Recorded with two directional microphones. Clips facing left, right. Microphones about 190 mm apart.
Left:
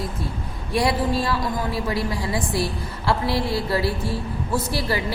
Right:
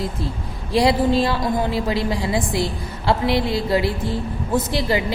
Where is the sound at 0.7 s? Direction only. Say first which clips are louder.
Right 5 dB; 25° right (ahead or behind).